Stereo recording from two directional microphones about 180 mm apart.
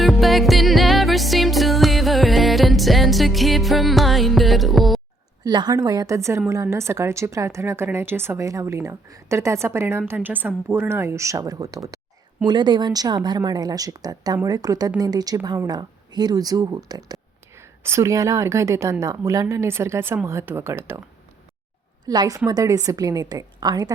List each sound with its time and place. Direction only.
0.0 s music: centre (ahead or behind)
5.4 s speech: 25° right (ahead or behind)
22.0 s a woman's voice: 20° right (ahead or behind)